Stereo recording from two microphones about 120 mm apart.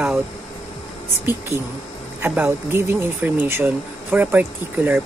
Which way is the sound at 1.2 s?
20° right (ahead or behind).